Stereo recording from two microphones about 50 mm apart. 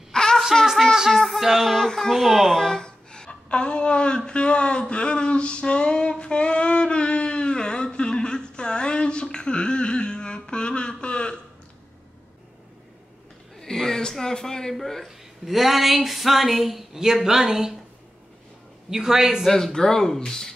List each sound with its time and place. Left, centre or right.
0.1 s a sound: centre
1.1 s music: centre
1.9 s a woman's voice: centre
4.3 s a sound: left
13.6 s chuckle: centre
14.8 s speech: centre
18.9 s a man's voice: centre
19.4 s speech: centre